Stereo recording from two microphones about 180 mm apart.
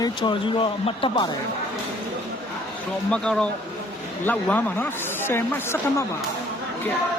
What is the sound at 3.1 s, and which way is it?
Speech, 5° left (ahead or behind).